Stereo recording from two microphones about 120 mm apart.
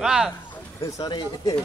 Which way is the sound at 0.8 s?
30° left (ahead or behind).